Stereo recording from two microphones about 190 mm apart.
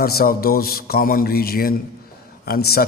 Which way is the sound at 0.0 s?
55° left (ahead or behind).